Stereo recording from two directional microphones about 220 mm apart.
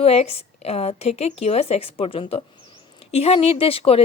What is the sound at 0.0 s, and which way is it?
Speech, 30° left (ahead or behind).